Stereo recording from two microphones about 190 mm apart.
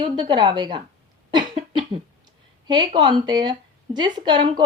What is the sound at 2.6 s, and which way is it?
A woman's voice, 25° right (ahead or behind).